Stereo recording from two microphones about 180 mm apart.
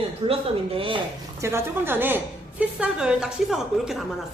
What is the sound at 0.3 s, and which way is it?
Speech, 30° right (ahead or behind).